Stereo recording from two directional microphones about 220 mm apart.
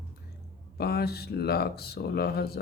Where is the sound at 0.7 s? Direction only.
45° left (ahead or behind).